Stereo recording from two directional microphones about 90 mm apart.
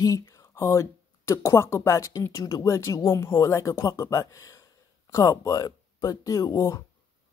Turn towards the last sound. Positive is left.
turn(degrees=40)  # may be behind; listen again after turning